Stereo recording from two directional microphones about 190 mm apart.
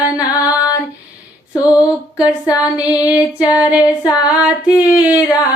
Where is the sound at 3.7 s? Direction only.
5° right (ahead or behind).